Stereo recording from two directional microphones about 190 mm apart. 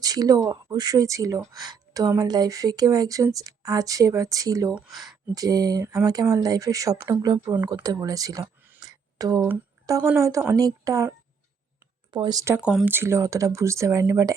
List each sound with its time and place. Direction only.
0.0 s speech: 20° right (ahead or behind)
4.7 s speech: centre (ahead or behind)
5.3 s speech: 20° right (ahead or behind)
8.8 s a sound: 20° right (ahead or behind)
10.1 s speech: 15° right (ahead or behind)
12.1 s speech: 20° right (ahead or behind)
12.5 s speech: 5° right (ahead or behind)